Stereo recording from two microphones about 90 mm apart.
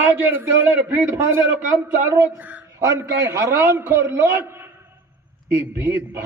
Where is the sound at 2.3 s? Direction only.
15° right (ahead or behind).